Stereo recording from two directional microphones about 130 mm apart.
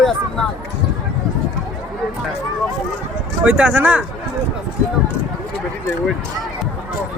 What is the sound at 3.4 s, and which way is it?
Speech, 10° right (ahead or behind).